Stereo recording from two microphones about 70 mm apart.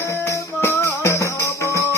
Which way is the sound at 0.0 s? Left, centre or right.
Left.